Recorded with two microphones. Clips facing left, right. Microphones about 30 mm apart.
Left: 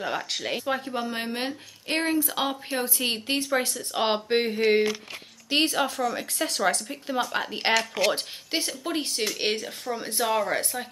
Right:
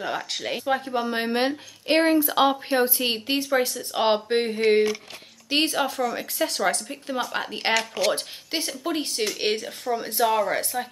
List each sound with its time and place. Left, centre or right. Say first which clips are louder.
0.0 s speech: right 1 dB; centre
1.3 s speech: right 7 dB; right
3.0 s speech: right 2 dB; centre